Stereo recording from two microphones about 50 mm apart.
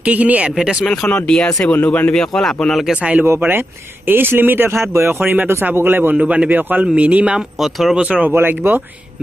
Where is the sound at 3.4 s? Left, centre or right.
Right.